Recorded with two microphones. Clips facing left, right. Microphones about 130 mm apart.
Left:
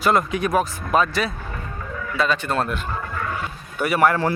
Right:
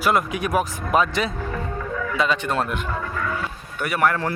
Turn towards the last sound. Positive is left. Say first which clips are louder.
# left 3 dB
turn(degrees=5)  # may be behind; listen again after turning